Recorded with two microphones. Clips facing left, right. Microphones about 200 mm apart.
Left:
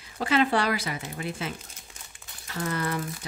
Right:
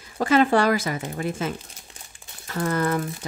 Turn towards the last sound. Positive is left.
turn(degrees=-45)  # may be behind; listen again after turning